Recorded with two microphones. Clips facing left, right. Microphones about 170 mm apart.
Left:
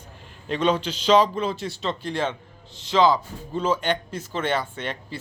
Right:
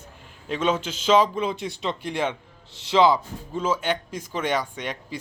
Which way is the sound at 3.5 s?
5° right (ahead or behind).